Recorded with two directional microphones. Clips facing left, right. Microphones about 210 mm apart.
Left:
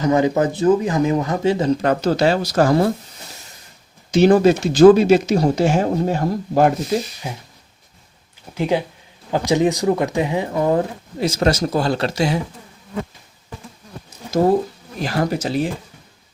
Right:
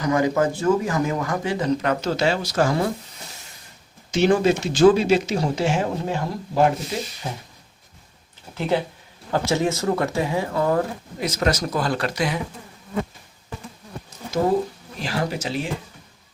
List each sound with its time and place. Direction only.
0.0 s speech: 25° left (ahead or behind)
4.1 s speech: 35° left (ahead or behind)
7.2 s speech: 10° left (ahead or behind)
8.5 s speech: 15° left (ahead or behind)
15.0 s speech: 45° left (ahead or behind)